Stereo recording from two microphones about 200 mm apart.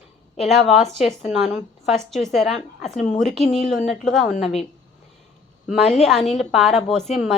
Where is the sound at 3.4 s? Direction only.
30° left (ahead or behind).